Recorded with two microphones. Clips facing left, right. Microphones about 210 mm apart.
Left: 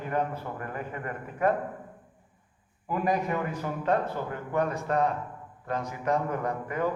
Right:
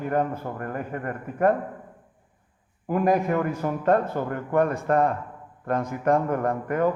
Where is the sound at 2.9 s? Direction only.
50° right (ahead or behind).